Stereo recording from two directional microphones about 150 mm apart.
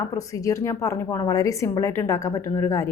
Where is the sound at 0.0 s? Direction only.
20° left (ahead or behind).